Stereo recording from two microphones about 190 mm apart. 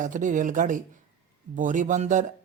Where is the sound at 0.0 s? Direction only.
45° right (ahead or behind).